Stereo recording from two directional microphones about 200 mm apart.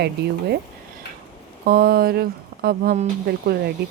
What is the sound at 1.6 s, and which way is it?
Speech, 50° right (ahead or behind).